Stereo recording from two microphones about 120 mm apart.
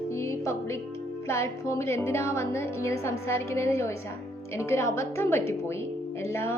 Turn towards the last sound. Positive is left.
turn(degrees=20)  # may be behind; listen again after turning